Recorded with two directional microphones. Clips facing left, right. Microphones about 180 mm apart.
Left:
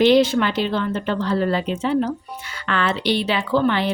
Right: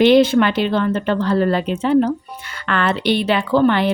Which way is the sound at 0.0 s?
60° right (ahead or behind).